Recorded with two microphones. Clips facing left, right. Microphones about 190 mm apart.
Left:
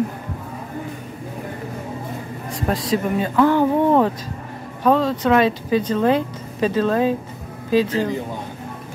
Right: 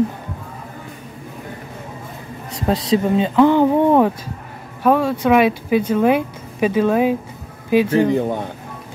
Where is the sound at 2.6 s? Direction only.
25° right (ahead or behind).